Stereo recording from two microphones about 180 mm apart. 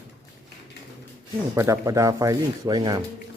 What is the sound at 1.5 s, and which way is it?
Speech, 15° right (ahead or behind).